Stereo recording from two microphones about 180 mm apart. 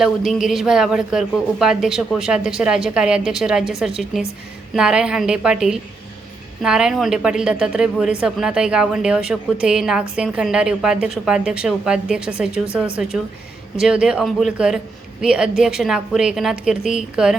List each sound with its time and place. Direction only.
0.0 s a woman's voice: centre (ahead or behind)